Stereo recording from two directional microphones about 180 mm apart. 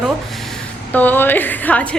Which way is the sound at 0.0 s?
Centre (ahead or behind).